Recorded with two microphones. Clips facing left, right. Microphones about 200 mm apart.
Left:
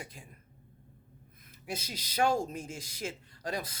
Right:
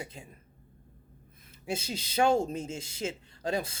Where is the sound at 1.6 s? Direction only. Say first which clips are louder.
Right 5 dB; 25° right (ahead or behind).